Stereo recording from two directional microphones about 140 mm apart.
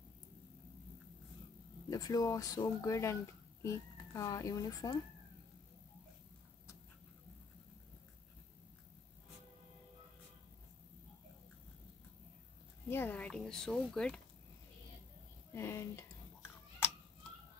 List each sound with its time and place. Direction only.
1.9 s speech: 25° left (ahead or behind)
12.9 s speech: 15° left (ahead or behind)
15.5 s whispering: 20° left (ahead or behind)